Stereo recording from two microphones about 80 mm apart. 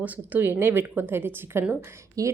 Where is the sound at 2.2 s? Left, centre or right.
Right.